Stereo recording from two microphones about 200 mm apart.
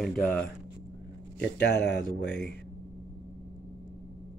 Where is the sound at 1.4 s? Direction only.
60° left (ahead or behind).